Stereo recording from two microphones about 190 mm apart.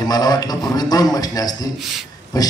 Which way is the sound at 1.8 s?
Centre (ahead or behind).